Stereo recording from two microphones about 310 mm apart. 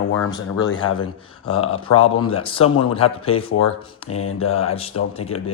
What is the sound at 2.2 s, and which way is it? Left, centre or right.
Speech, centre.